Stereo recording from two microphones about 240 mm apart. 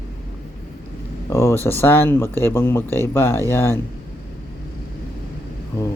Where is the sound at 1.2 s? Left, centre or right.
Centre.